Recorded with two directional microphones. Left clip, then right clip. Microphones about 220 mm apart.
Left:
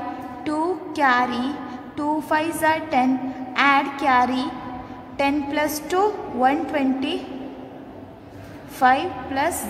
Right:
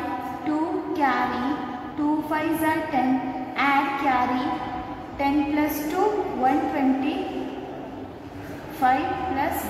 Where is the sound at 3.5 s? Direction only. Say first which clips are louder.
Left 4 dB; 50° left (ahead or behind).